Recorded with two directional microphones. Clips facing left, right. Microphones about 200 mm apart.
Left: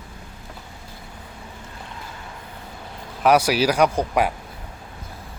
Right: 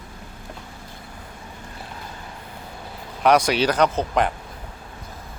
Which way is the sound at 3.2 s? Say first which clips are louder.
Even; 5° left (ahead or behind).